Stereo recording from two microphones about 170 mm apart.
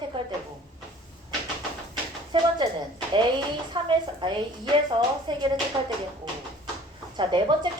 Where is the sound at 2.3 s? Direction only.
30° right (ahead or behind).